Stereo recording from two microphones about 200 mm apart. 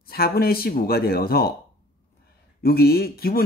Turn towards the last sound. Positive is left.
turn(degrees=50)  # may be behind; listen again after turning